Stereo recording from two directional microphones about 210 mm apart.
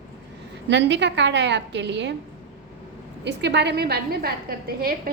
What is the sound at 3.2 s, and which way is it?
A woman's voice, 55° right (ahead or behind).